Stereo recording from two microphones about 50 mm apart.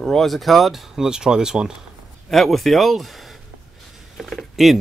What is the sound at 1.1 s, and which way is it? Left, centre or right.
Speech, centre.